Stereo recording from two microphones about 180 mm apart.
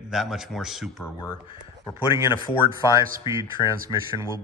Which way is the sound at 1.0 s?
20° left (ahead or behind).